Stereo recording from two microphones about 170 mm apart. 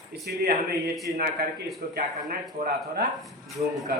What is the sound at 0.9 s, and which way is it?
Speech, centre (ahead or behind).